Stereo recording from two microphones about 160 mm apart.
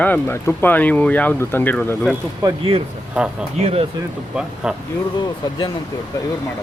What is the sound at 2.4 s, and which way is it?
Speech, 25° right (ahead or behind).